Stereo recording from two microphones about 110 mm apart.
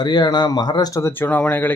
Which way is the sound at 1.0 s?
15° left (ahead or behind).